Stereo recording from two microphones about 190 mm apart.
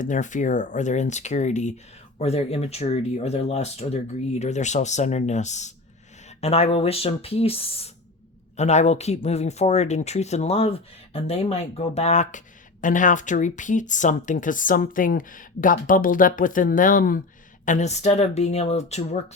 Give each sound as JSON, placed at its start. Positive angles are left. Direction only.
{"t": 0.0, "sound": "speech", "side_deg": 40}